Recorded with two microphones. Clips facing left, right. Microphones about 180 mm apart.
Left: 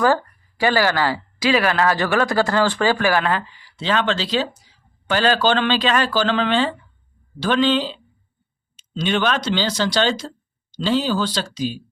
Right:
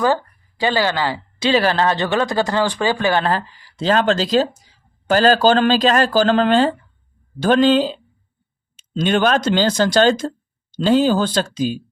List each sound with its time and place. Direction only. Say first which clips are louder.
0.0 s a woman's voice: even; 20° right (ahead or behind); by 7.9 s 45° right (ahead or behind)
9.0 s speech: right 4 dB; 45° right (ahead or behind)